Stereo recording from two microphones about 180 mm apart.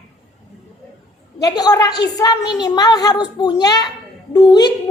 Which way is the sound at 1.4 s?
20° left (ahead or behind).